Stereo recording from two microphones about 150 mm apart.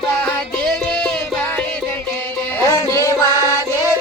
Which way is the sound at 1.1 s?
5° left (ahead or behind).